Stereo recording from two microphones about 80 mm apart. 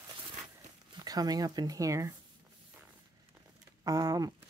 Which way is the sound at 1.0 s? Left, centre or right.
Right.